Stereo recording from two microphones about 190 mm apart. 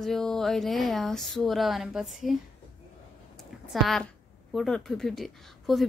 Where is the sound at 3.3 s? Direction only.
Centre (ahead or behind).